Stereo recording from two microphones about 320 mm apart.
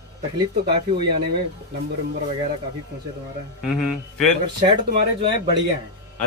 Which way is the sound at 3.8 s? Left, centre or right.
Centre.